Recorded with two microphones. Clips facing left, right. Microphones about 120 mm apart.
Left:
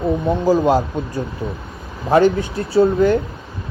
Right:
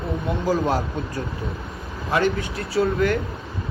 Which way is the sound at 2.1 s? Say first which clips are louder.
Left 8 dB; 30° left (ahead or behind).